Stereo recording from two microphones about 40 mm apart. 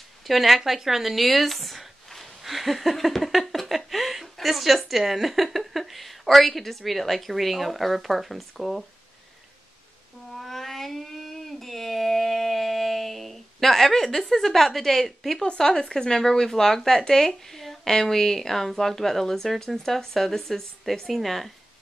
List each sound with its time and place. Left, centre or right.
0.3 s speech: centre
10.3 s a sound: centre
14.3 s a woman's voice: centre